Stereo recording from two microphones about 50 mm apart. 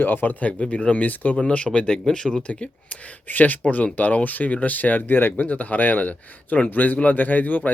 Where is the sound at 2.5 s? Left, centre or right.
Left.